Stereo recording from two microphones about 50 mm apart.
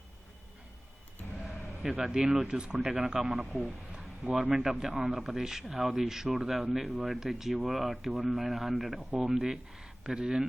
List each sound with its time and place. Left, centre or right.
1.4 s a sound: centre
2.5 s speech: centre
2.7 s speech: centre